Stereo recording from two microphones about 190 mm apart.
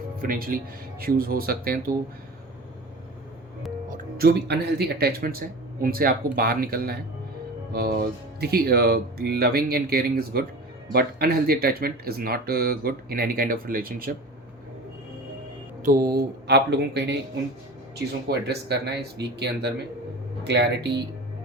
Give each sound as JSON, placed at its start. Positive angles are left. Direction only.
{"t": 0.2, "sound": "speech", "side_deg": -50}
{"t": 3.8, "sound": "speech", "side_deg": -50}
{"t": 15.8, "sound": "speech", "side_deg": -45}
{"t": 16.1, "sound": "speech", "side_deg": -60}